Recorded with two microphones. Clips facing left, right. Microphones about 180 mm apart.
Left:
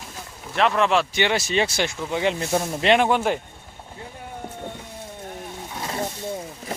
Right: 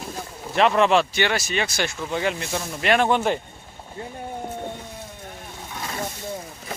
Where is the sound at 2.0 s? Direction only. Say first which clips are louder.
Left 2 dB; 15° left (ahead or behind).